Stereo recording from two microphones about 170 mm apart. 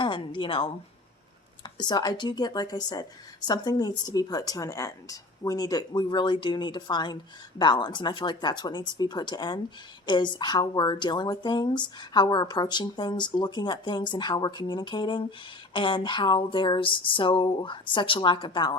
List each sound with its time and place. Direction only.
0.0 s speech: 30° left (ahead or behind)